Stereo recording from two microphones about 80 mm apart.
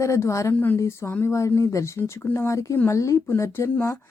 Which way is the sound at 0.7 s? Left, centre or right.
Left.